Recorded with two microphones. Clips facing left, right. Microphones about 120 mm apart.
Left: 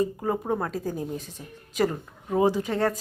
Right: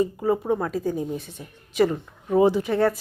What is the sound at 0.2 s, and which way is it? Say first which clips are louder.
Speech: right 4 dB; 5° right (ahead or behind).